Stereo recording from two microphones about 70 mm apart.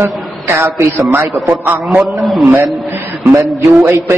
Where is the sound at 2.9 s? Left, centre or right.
Right.